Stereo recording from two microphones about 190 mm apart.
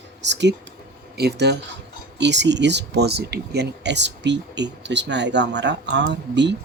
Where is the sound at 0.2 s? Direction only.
65° right (ahead or behind).